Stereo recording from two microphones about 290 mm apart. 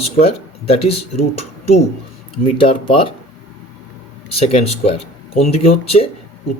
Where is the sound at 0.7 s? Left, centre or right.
Left.